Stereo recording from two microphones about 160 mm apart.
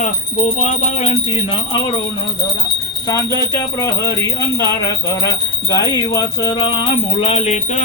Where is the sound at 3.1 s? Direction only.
20° left (ahead or behind).